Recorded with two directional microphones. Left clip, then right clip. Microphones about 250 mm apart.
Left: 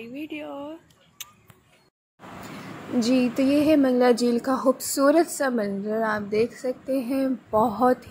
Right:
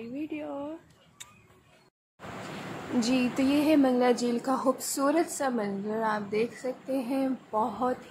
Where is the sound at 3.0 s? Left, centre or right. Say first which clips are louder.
Left 5 dB; centre.